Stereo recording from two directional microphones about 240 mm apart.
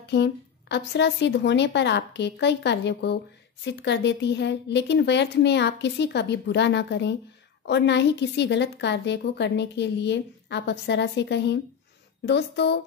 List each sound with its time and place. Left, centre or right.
0.0 s a woman's voice: left